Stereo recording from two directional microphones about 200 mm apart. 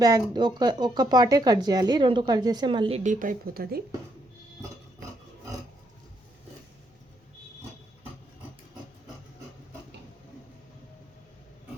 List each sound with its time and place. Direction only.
0.0 s speech: 20° right (ahead or behind)
3.0 s a woman's voice: 40° right (ahead or behind)